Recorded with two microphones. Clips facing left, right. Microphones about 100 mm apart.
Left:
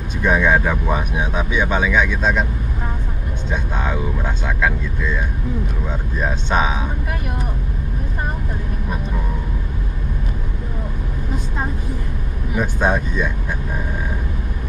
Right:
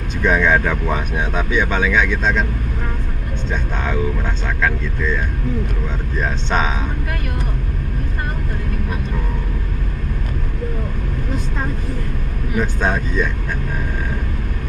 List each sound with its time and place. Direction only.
0.2 s speech: 10° left (ahead or behind)
4.6 s speech: 10° left (ahead or behind)
12.5 s speech: 10° left (ahead or behind)